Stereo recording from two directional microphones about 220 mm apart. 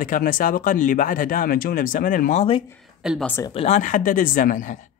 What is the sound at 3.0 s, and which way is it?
Speech, 5° right (ahead or behind).